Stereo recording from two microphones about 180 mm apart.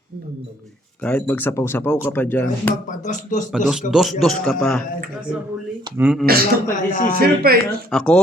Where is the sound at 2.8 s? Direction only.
45° left (ahead or behind).